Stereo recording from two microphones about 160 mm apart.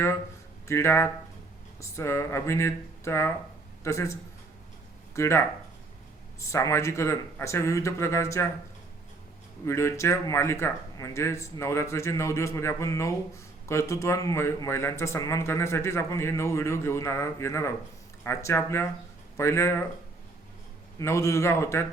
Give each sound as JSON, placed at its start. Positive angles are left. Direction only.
{"t": 0.7, "sound": "a man's voice", "side_deg": 15}
{"t": 9.6, "sound": "speech", "side_deg": 15}
{"t": 21.0, "sound": "speech", "side_deg": 20}